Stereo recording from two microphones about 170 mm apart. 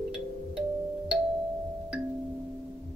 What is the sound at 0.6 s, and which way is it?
Music, centre (ahead or behind).